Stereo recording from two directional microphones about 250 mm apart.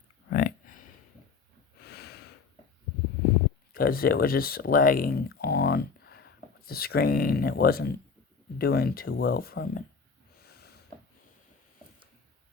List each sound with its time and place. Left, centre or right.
0.3 s a sound: left
1.8 s snort: left
3.7 s speech: left
10.4 s snort: left